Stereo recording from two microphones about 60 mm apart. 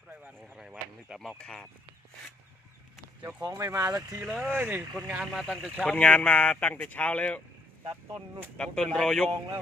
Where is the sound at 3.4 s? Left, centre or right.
Right.